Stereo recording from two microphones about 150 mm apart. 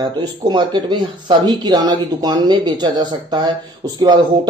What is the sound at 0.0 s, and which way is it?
A man's voice, 30° right (ahead or behind).